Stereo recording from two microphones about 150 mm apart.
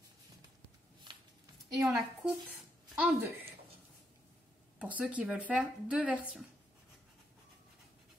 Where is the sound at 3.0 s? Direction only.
10° right (ahead or behind).